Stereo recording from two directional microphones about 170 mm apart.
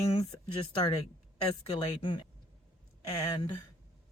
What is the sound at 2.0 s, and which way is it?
Speech, 30° left (ahead or behind).